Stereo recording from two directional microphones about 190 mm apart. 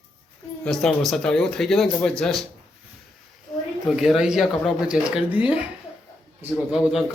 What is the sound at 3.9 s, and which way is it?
Speech, centre (ahead or behind).